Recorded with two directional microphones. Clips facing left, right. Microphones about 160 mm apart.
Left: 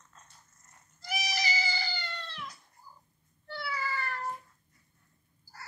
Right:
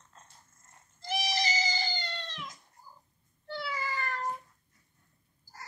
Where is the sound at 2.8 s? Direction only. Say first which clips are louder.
Even; 10° right (ahead or behind).